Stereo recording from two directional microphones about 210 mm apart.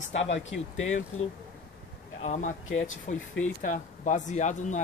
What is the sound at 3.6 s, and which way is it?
Speech, 35° left (ahead or behind).